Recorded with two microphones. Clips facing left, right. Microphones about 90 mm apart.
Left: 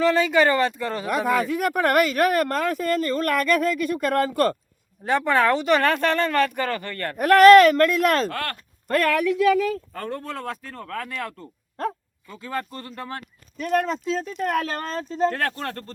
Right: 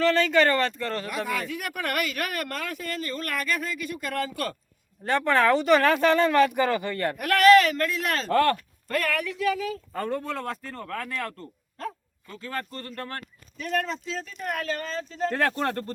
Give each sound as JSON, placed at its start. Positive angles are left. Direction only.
{"t": 0.0, "sound": "speech", "side_deg": 15}
{"t": 1.4, "sound": "speech", "side_deg": 40}
{"t": 5.0, "sound": "speech", "side_deg": 5}
{"t": 7.2, "sound": "speech", "side_deg": 40}
{"t": 9.4, "sound": "speech", "side_deg": 70}
{"t": 9.9, "sound": "speech", "side_deg": -5}
{"t": 13.6, "sound": "speech", "side_deg": 45}
{"t": 14.3, "sound": "speech", "side_deg": 75}
{"t": 14.8, "sound": "speech", "side_deg": 45}
{"t": 15.3, "sound": "speech", "side_deg": -20}